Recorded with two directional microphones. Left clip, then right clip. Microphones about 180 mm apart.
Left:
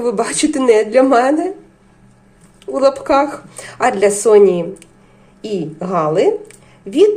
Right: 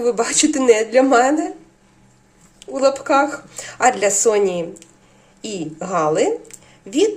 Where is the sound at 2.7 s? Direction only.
5° left (ahead or behind).